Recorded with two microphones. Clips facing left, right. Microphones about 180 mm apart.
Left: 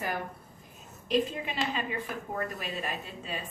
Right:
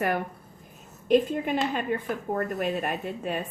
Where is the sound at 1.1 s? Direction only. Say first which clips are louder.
Right 7 dB; 50° right (ahead or behind).